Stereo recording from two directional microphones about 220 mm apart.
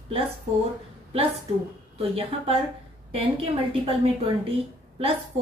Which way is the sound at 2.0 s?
25° right (ahead or behind).